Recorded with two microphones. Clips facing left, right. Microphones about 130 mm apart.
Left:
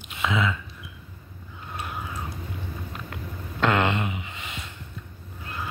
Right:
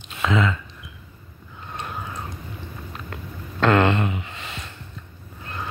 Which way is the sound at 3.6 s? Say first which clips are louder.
Right 5 dB; 15° left (ahead or behind).